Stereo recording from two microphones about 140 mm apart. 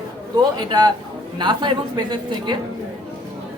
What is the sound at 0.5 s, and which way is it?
A woman's voice, 30° right (ahead or behind).